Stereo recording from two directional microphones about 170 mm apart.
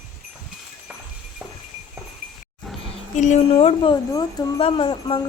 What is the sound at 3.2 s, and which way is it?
Speech, 45° left (ahead or behind).